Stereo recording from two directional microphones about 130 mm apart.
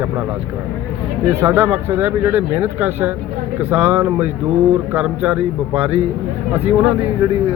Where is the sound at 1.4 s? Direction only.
20° right (ahead or behind).